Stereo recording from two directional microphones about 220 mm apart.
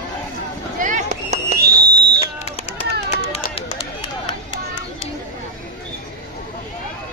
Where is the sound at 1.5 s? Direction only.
45° right (ahead or behind).